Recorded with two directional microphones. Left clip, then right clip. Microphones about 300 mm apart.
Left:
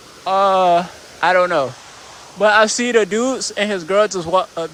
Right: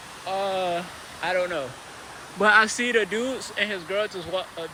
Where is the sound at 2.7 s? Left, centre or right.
Centre.